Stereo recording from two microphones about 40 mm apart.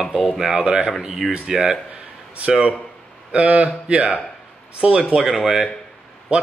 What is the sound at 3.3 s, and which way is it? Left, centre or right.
Speech, right.